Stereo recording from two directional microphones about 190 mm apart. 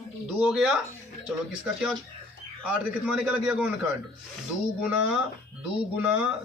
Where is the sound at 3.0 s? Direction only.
5° right (ahead or behind).